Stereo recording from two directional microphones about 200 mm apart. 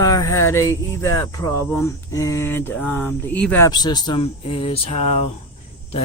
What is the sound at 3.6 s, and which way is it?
Speech, 20° left (ahead or behind).